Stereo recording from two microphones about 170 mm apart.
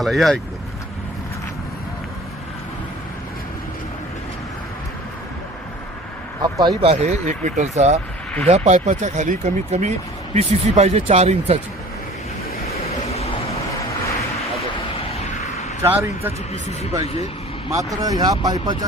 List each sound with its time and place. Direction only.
0.0 s speech: centre (ahead or behind)
6.4 s speech: 25° right (ahead or behind)
6.8 s speech: 40° right (ahead or behind)
12.6 s vehicle: 40° left (ahead or behind)
15.8 s speech: 15° right (ahead or behind)
17.0 s speech: 35° left (ahead or behind)
18.0 s speech: 20° right (ahead or behind)